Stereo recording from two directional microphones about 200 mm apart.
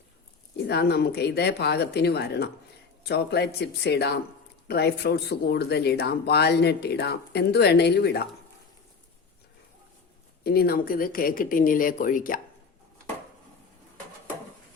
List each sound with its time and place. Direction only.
0.5 s speech: 55° left (ahead or behind)
10.4 s speech: 50° left (ahead or behind)